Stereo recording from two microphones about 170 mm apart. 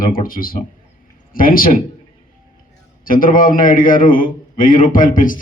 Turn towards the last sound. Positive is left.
turn(degrees=50)  # may be behind; listen again after turning